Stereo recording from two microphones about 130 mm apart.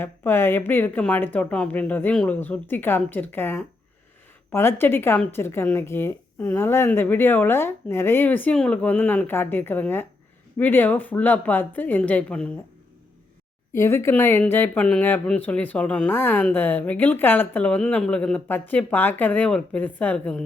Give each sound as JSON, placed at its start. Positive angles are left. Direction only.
{"t": 0.0, "sound": "a woman's voice", "side_deg": 15}
{"t": 13.7, "sound": "speech", "side_deg": 20}